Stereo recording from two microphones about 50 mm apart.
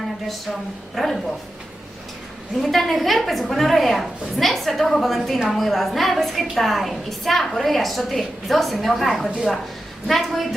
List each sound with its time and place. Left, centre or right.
0.9 s a woman's voice: centre
2.6 s a woman's voice: centre